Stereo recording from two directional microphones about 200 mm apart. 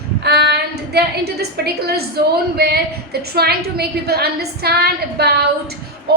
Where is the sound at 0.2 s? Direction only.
55° right (ahead or behind).